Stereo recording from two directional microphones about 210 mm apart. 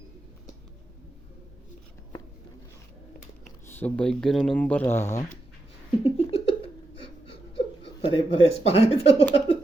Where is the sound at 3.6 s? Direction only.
10° left (ahead or behind).